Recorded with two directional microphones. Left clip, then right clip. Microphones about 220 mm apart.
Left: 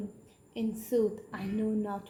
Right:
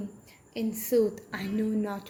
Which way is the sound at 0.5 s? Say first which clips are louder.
Right 4 dB; 20° right (ahead or behind).